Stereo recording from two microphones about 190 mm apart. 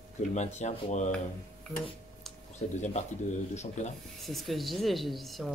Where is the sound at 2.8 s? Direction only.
35° left (ahead or behind).